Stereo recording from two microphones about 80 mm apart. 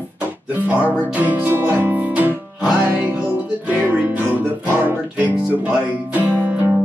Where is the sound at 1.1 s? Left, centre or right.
Right.